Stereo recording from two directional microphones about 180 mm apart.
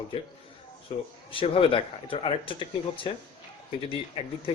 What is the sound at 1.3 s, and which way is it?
A man's voice, 30° left (ahead or behind).